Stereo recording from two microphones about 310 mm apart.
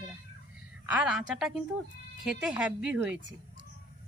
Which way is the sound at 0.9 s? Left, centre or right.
Centre.